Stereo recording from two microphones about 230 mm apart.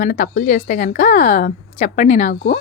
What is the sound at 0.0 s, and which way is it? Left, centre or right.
A woman's voice, left.